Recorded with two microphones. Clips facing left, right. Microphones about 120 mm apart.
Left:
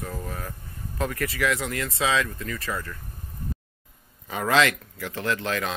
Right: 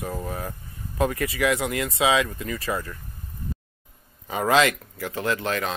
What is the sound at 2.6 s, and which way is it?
Speech, 25° right (ahead or behind).